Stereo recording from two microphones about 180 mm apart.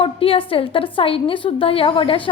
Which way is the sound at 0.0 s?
30° left (ahead or behind).